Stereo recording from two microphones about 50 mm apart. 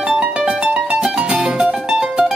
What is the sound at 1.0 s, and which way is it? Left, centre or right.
Music, centre.